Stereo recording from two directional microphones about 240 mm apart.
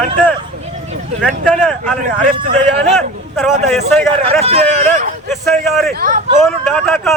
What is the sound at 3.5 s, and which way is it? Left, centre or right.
Speech, right.